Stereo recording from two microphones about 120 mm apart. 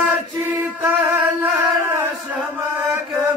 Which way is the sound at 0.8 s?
15° right (ahead or behind).